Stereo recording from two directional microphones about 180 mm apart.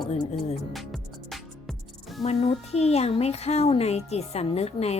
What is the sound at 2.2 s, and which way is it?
A woman's voice, 35° left (ahead or behind).